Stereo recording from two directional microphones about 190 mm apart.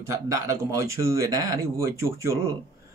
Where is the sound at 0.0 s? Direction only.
15° right (ahead or behind).